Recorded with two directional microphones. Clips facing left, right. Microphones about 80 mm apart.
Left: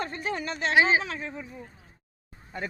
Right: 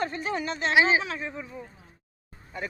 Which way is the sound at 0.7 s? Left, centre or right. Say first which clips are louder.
Even; left.